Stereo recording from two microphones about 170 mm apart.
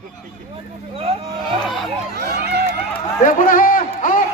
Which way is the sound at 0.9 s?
35° right (ahead or behind).